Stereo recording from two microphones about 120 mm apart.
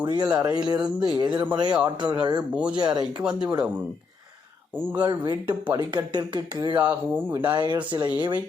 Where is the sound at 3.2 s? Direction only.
10° right (ahead or behind).